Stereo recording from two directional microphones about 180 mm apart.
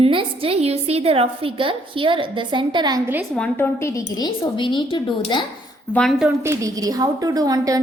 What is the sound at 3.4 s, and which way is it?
A woman's voice, 10° left (ahead or behind).